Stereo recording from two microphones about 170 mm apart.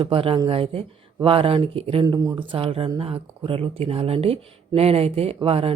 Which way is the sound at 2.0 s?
20° right (ahead or behind).